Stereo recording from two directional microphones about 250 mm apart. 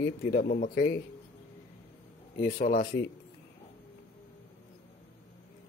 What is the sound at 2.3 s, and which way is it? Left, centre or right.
Speech, left.